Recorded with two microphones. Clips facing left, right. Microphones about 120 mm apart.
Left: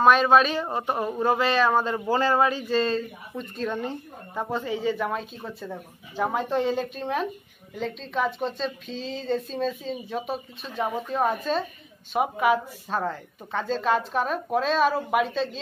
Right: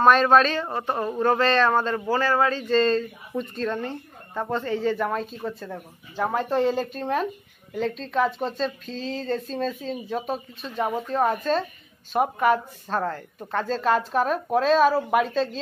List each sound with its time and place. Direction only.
0.0 s speech: 5° left (ahead or behind)